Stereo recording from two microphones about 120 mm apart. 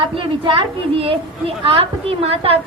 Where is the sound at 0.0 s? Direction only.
45° right (ahead or behind).